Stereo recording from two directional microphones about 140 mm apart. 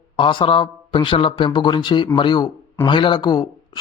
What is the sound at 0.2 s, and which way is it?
Speech, 35° left (ahead or behind).